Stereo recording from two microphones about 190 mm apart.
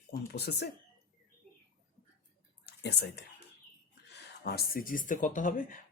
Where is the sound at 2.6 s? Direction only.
60° left (ahead or behind).